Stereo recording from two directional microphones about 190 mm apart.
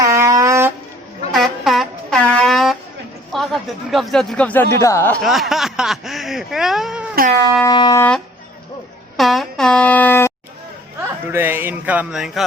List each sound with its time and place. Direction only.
0.0 s music: 15° right (ahead or behind)
1.3 s air horn: centre (ahead or behind)
3.3 s speech: centre (ahead or behind)
5.2 s speech: centre (ahead or behind)
7.6 s shofar: 20° left (ahead or behind)
9.1 s air horn: centre (ahead or behind)
11.3 s speech: 10° right (ahead or behind)